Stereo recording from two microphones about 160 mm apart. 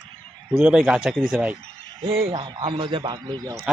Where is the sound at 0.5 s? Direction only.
5° right (ahead or behind).